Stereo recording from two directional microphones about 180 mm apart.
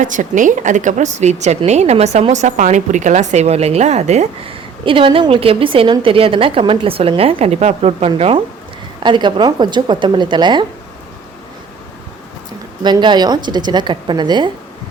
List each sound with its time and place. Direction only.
0.0 s a woman's voice: 45° right (ahead or behind); by 10.7 s 25° right (ahead or behind)
12.8 s a woman's voice: 25° right (ahead or behind)